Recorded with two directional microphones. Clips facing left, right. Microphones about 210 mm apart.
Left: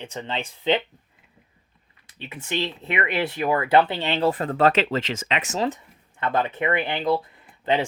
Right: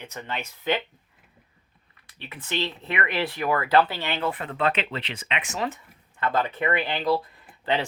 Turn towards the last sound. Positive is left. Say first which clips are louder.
# left 3 dB
turn(degrees=20)  # may be behind; listen again after turning